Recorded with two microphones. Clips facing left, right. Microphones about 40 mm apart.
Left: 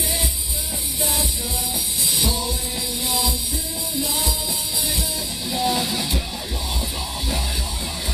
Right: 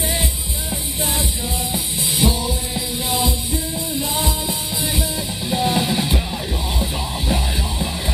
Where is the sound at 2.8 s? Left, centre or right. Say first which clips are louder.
Right 3 dB; right.